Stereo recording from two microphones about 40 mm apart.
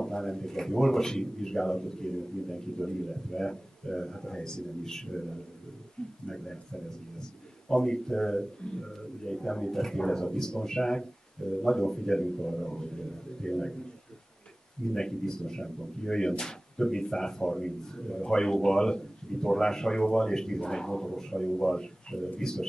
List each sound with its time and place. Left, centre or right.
0.0 s speech: centre
6.2 s speech: centre
7.6 s speech: centre
15.0 s speech: centre